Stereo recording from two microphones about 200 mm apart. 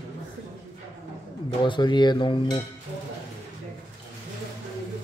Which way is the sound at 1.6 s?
20° left (ahead or behind).